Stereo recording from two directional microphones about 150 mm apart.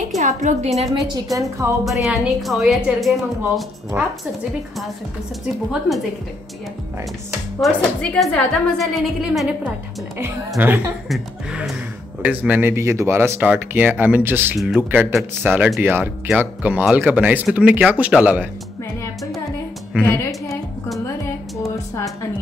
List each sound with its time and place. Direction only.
0.2 s a woman's voice: 55° right (ahead or behind)
1.0 s a woman's voice: 25° right (ahead or behind)
1.9 s a woman's voice: centre (ahead or behind)
3.9 s speech: 15° right (ahead or behind)
7.6 s a woman's voice: 5° left (ahead or behind)
10.6 s speech: 10° right (ahead or behind)
11.1 s a woman's voice: centre (ahead or behind)
12.2 s speech: 10° right (ahead or behind)
20.0 s a woman's voice: 15° left (ahead or behind)
21.6 s a sound: 20° left (ahead or behind)